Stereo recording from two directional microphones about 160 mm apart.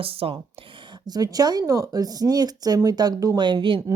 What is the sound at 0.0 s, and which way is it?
Speech, 35° right (ahead or behind).